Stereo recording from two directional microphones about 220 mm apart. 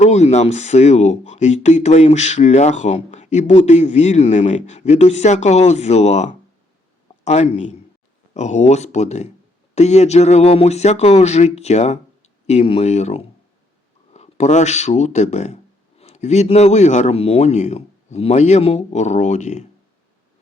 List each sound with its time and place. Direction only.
0.0 s speech: 30° left (ahead or behind)